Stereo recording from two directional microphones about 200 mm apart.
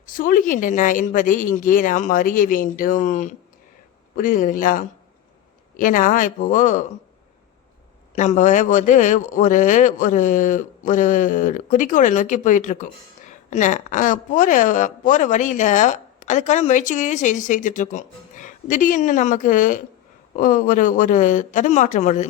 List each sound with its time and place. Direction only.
0.0 s a woman's voice: 45° left (ahead or behind)
8.1 s a woman's voice: 35° left (ahead or behind)